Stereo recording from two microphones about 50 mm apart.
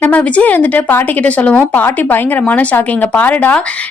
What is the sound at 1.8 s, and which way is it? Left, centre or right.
A woman's voice, left.